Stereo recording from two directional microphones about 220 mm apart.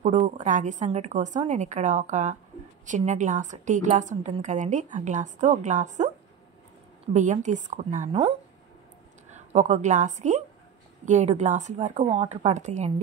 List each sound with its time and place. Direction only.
0.0 s speech: 30° right (ahead or behind)
7.2 s a woman's voice: 35° right (ahead or behind)